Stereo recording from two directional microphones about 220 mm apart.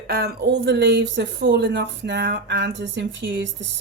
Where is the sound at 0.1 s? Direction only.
45° right (ahead or behind).